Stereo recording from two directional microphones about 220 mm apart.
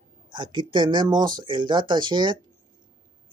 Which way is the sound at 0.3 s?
20° right (ahead or behind).